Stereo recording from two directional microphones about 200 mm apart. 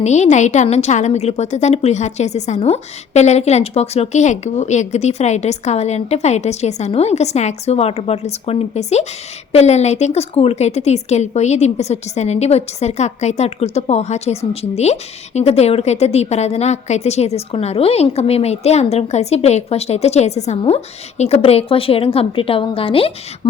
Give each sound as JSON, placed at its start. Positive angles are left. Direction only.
{"t": 0.0, "sound": "a woman's voice", "side_deg": 35}